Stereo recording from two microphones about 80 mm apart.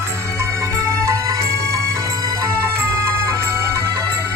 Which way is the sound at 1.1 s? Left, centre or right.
Right.